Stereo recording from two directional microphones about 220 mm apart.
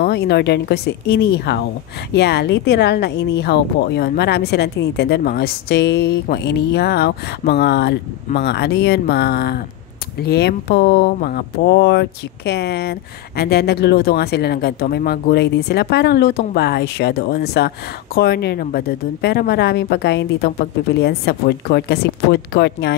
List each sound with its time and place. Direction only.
0.0 s speech: 50° left (ahead or behind)